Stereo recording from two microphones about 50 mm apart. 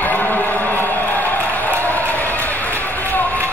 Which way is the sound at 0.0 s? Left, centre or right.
Left.